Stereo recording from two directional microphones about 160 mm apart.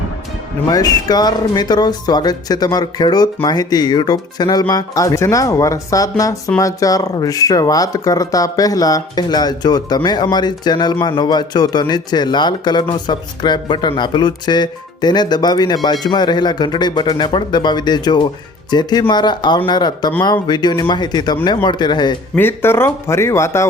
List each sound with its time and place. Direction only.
0.7 s speech: 25° left (ahead or behind)
22.4 s speech: 15° left (ahead or behind)